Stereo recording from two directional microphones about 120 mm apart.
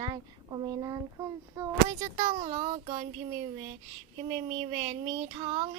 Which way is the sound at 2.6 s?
55° right (ahead or behind).